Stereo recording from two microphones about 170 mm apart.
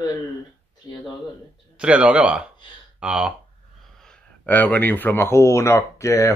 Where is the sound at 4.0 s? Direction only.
5° left (ahead or behind).